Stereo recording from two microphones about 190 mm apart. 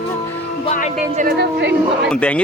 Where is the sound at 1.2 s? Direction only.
55° right (ahead or behind).